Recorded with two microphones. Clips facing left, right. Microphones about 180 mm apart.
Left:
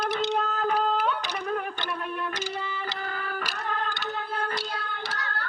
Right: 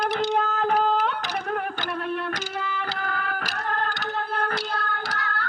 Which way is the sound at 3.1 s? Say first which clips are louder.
Right 3 dB; 65° right (ahead or behind).